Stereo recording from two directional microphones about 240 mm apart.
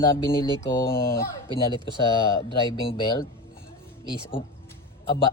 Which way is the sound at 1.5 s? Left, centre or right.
Centre.